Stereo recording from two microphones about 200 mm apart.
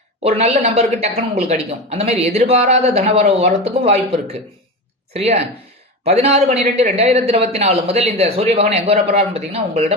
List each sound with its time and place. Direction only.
0.2 s speech: 30° right (ahead or behind)